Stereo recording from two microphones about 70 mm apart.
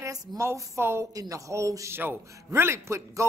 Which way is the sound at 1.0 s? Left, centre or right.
Right.